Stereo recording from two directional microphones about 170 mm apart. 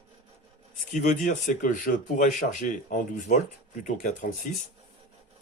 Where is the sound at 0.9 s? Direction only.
45° left (ahead or behind).